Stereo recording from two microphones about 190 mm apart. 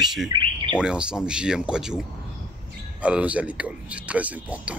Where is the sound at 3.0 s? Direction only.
5° right (ahead or behind).